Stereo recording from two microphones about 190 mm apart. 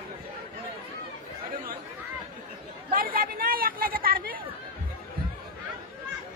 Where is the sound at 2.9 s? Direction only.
50° right (ahead or behind).